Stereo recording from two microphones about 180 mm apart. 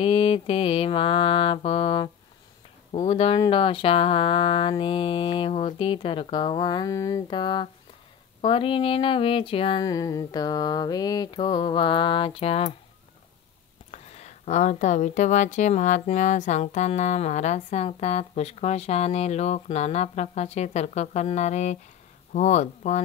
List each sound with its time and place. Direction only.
0.0 s a woman's voice: 30° left (ahead or behind)
13.9 s a woman's voice: 40° left (ahead or behind)